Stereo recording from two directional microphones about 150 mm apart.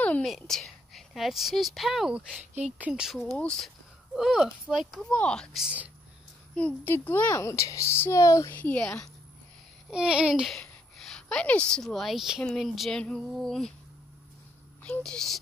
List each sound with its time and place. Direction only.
0.0 s a woman's voice: 5° left (ahead or behind)
6.5 s a woman's voice: 10° left (ahead or behind)
9.8 s speech: 5° right (ahead or behind)
14.8 s speech: 5° left (ahead or behind)